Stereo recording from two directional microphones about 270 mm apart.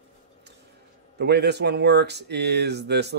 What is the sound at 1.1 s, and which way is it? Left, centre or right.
Speech, right.